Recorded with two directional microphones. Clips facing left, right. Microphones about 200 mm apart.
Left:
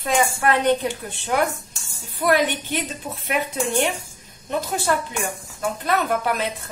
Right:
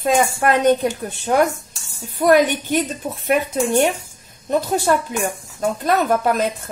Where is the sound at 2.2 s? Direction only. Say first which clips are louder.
Right 6 dB; 45° right (ahead or behind).